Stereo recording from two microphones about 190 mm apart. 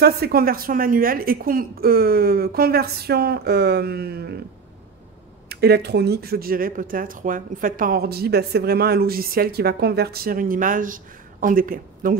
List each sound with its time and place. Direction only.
0.0 s speech: 55° right (ahead or behind)
5.5 s speech: 60° right (ahead or behind)